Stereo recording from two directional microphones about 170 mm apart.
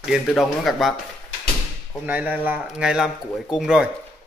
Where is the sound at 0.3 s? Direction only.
Centre (ahead or behind).